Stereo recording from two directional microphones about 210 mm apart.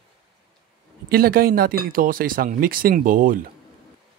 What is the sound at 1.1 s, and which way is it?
Speech, 45° right (ahead or behind).